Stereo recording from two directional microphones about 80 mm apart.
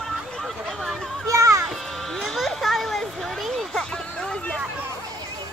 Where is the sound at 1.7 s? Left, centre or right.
Centre.